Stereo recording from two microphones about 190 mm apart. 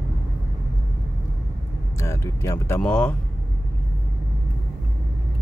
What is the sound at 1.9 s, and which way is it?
Vehicle, 15° left (ahead or behind).